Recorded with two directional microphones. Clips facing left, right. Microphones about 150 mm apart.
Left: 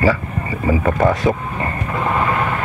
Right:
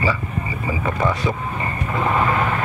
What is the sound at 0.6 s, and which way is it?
Vehicle, 45° left (ahead or behind).